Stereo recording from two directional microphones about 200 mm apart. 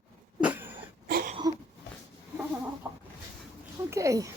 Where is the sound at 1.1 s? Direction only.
50° right (ahead or behind).